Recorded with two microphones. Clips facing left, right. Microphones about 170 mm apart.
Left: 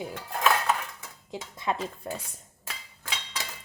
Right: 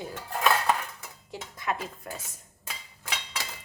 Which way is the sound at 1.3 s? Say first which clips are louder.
Left 2 dB; 25° left (ahead or behind).